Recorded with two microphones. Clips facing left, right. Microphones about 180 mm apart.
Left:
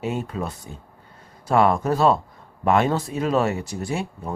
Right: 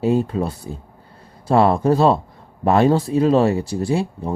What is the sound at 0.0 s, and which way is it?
Speech, 35° right (ahead or behind).